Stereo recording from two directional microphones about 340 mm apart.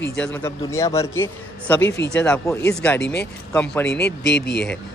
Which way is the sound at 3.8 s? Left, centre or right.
Left.